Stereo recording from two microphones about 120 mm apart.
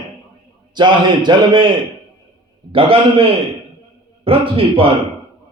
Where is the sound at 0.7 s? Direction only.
40° right (ahead or behind).